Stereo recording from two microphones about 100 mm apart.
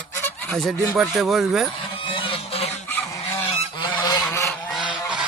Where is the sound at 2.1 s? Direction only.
70° left (ahead or behind).